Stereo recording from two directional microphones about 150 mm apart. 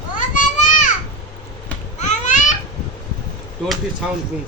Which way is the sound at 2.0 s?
55° left (ahead or behind).